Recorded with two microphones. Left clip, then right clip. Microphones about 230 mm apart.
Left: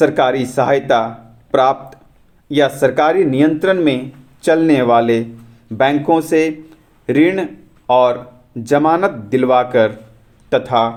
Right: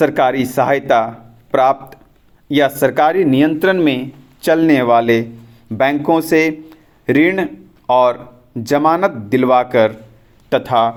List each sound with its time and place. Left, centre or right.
0.0 s speech: right